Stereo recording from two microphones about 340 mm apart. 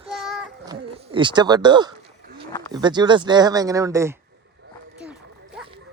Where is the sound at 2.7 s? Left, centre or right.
Centre.